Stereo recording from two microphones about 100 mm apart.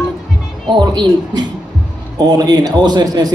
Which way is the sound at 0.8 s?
45° right (ahead or behind).